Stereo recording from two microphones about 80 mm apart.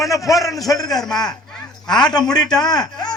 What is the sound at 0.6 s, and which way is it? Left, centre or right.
Speech, left.